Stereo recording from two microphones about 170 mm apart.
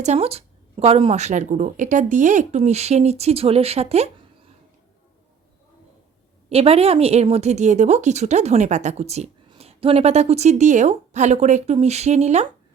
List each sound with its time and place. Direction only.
0.0 s a woman's voice: 40° right (ahead or behind)
6.5 s a woman's voice: 35° right (ahead or behind)